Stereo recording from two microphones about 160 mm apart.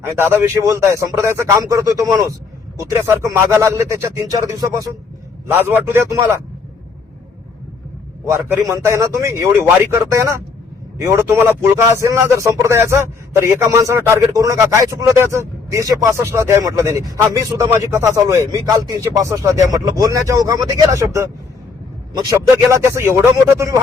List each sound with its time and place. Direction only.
0.0 s a man's voice: 15° right (ahead or behind)
8.3 s a man's voice: 15° right (ahead or behind)